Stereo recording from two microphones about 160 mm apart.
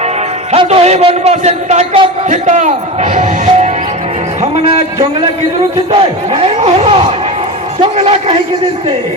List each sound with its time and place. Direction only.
0.5 s a man's voice: 40° right (ahead or behind)
5.9 s speech: 35° right (ahead or behind)